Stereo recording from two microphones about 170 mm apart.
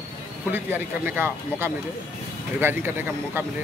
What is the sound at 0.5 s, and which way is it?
Speech, 10° right (ahead or behind).